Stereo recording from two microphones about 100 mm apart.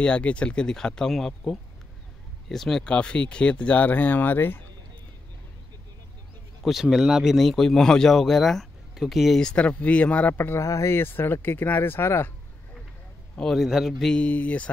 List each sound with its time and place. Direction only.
0.0 s a man's voice: 10° left (ahead or behind)
6.6 s a man's voice: 5° right (ahead or behind); by 12.3 s 25° left (ahead or behind)
13.4 s a man's voice: centre (ahead or behind)
14.2 s a man's voice: 15° left (ahead or behind)